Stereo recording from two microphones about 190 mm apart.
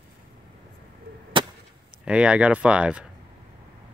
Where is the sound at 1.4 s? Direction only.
25° right (ahead or behind).